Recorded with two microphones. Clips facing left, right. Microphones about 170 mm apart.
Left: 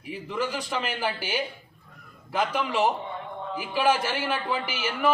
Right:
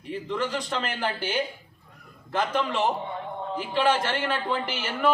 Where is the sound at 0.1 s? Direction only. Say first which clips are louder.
Right 1 dB; 10° left (ahead or behind).